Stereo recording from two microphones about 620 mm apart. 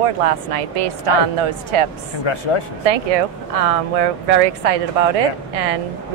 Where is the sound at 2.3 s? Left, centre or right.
Left.